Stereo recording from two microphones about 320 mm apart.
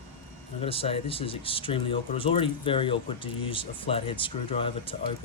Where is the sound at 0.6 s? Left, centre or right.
Centre.